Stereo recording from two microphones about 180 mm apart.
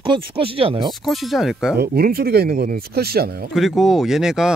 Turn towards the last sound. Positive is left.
turn(degrees=-5)  # may be behind; listen again after turning